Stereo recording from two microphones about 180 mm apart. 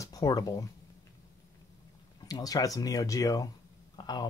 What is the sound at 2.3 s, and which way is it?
Speech, 20° left (ahead or behind).